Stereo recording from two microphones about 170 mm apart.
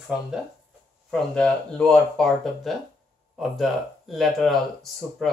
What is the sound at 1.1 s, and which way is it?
Speech, 5° left (ahead or behind).